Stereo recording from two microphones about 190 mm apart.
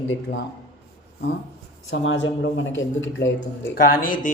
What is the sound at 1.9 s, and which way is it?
Speech, 80° left.